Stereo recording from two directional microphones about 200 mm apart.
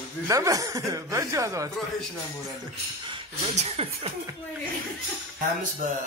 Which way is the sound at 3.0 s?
30° right (ahead or behind).